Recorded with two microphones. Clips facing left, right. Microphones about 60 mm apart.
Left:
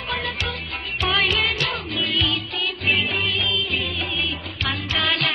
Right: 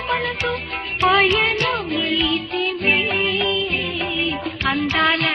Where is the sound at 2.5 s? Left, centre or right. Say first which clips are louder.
Right 4 dB; right.